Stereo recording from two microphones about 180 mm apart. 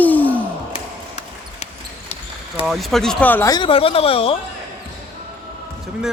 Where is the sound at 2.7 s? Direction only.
Centre (ahead or behind).